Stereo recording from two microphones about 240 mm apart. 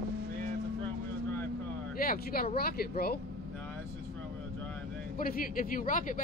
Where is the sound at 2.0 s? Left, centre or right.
Left.